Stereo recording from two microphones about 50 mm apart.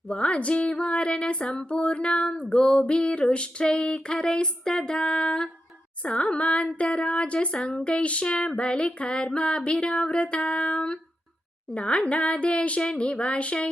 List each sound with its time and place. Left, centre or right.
0.1 s speech: left